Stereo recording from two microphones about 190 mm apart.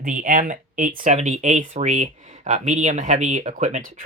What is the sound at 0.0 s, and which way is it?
Speech, 45° right (ahead or behind).